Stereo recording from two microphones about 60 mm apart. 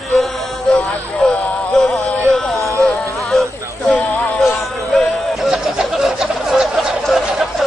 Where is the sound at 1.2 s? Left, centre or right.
Centre.